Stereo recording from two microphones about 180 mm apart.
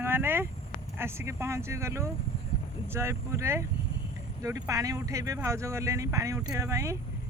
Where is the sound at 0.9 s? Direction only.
15° right (ahead or behind).